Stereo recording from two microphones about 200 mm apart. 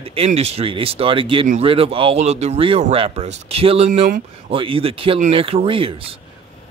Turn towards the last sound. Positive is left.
turn(degrees=-25)  # may be behind; listen again after turning